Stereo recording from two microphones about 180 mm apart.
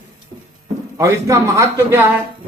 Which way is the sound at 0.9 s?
15° right (ahead or behind).